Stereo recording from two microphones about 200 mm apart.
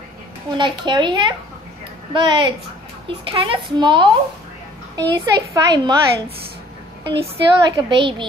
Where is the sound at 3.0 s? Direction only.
25° right (ahead or behind).